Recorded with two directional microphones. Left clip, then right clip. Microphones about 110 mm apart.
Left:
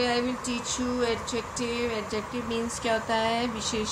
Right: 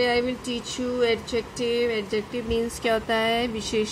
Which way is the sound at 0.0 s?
40° right (ahead or behind).